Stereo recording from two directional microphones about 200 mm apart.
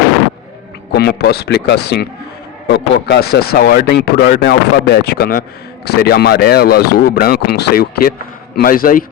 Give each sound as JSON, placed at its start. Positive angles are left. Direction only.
{"t": 0.9, "sound": "speech", "side_deg": 55}